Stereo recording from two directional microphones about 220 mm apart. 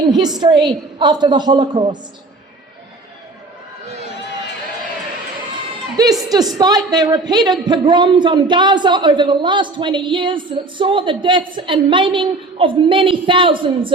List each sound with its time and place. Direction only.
0.1 s speech: 20° right (ahead or behind)
6.0 s a woman's voice: 15° right (ahead or behind)